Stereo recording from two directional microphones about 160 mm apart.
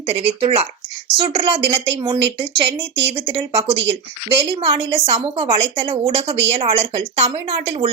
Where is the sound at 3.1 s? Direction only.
35° right (ahead or behind).